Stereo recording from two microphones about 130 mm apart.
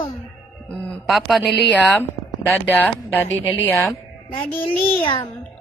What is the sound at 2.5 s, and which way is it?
Speech, 15° left (ahead or behind).